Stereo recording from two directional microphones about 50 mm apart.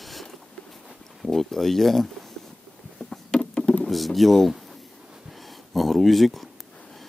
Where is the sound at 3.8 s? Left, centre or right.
Centre.